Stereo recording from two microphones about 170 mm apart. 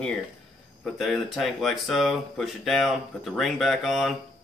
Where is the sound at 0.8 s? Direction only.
Centre (ahead or behind).